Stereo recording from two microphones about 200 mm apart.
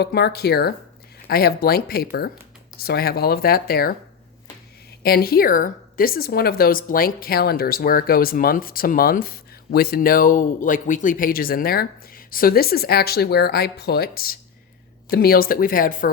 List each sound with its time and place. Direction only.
0.0 s a woman's voice: 55° left (ahead or behind)
5.0 s a woman's voice: 50° left (ahead or behind)